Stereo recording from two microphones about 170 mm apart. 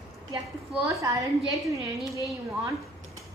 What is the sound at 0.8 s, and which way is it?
Speech, 20° right (ahead or behind).